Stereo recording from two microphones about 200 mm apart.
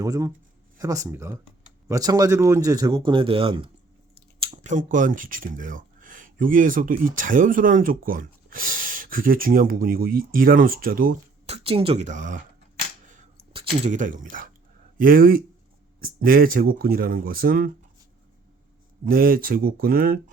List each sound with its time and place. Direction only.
0.0 s speech: 20° right (ahead or behind); by 11.2 s 45° right (ahead or behind)
11.4 s speech: 30° right (ahead or behind)
13.1 s a sound: 40° right (ahead or behind)
13.5 s speech: 30° right (ahead or behind); by 17.7 s 45° right (ahead or behind)
19.0 s speech: 45° right (ahead or behind)